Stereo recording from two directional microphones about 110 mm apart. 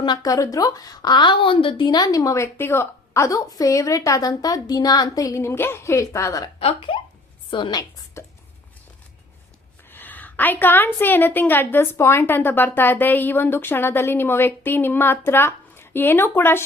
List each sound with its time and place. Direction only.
0.0 s speech: 45° left (ahead or behind)
0.3 s a woman's voice: 30° left (ahead or behind)
6.6 s speech: 60° left (ahead or behind)
7.5 s speech: 45° left (ahead or behind)
8.2 s a sound: 25° left (ahead or behind)
9.9 s a woman's voice: 15° left (ahead or behind)